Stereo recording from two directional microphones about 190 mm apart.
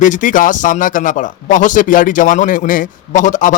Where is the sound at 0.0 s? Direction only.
45° left (ahead or behind).